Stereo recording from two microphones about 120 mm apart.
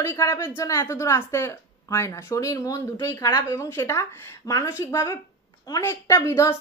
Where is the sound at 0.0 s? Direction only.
25° left (ahead or behind).